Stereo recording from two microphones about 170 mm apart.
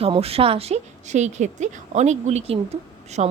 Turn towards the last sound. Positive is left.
turn(degrees=-40)  # may be behind; listen again after turning